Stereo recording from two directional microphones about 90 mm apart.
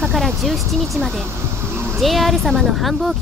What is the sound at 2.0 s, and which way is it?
Speech, centre (ahead or behind).